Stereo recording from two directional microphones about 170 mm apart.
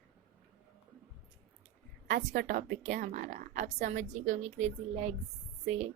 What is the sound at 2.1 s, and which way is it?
A woman's voice, 50° right (ahead or behind).